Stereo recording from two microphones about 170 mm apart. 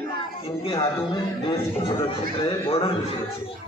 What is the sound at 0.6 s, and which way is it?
Speech, 30° left (ahead or behind).